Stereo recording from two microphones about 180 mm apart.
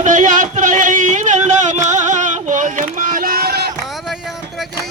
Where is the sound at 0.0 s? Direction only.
45° right (ahead or behind).